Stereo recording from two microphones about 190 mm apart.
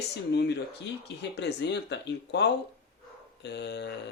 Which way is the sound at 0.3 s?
65° left (ahead or behind).